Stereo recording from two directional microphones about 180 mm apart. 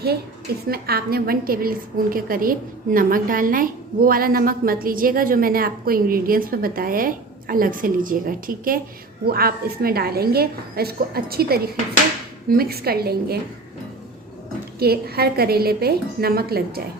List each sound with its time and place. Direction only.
0.7 s a woman's voice: 60° right (ahead or behind)
14.8 s a woman's voice: 60° right (ahead or behind)